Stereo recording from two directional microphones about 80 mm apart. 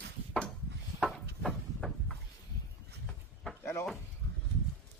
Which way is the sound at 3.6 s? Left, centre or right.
Left.